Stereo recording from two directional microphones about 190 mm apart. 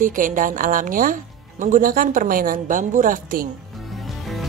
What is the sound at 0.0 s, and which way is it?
A woman's voice, 45° right (ahead or behind).